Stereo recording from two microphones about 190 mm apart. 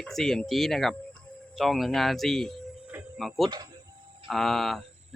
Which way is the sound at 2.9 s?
Centre (ahead or behind).